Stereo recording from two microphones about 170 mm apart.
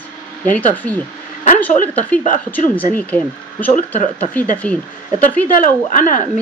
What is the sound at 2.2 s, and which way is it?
Speech, 50° left (ahead or behind).